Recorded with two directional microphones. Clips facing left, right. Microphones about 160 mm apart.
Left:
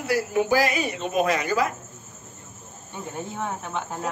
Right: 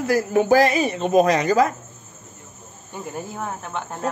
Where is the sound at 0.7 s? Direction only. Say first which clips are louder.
Right 6 dB; 30° right (ahead or behind).